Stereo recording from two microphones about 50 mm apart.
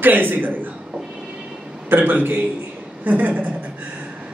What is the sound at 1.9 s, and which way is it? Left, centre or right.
A man's voice, right.